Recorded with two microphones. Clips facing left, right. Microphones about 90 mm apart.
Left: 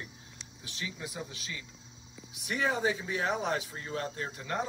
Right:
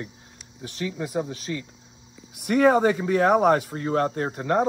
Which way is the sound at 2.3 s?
60° right (ahead or behind).